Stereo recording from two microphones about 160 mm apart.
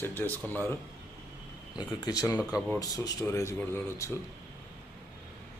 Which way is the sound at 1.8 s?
25° left (ahead or behind).